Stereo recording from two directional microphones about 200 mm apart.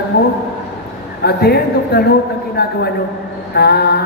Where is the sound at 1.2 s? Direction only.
55° left (ahead or behind).